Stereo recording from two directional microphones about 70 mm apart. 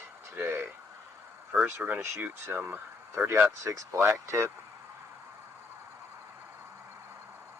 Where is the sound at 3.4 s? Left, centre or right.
Right.